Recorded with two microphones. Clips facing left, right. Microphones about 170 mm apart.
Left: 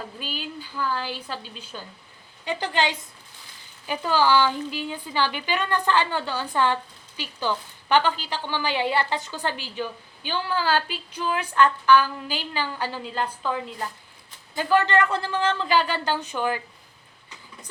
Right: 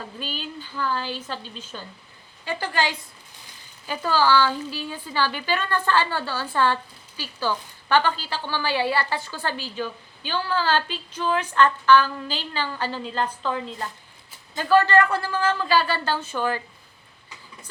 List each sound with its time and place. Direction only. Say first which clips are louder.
0.2 s a woman's voice: right 1 dB; 10° left (ahead or behind)